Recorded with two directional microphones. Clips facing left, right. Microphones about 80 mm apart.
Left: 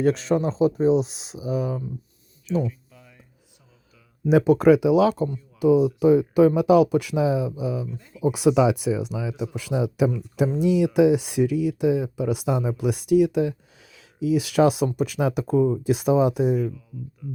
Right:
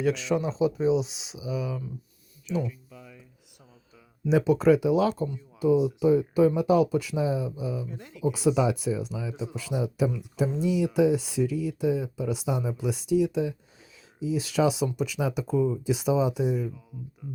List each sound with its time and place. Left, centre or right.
0.0 s speech: left
4.3 s speech: left
5.3 s speech: left
7.9 s speech: right
8.2 s speech: left
17.2 s speech: right